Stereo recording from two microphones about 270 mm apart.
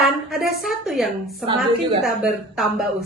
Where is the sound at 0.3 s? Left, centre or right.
Centre.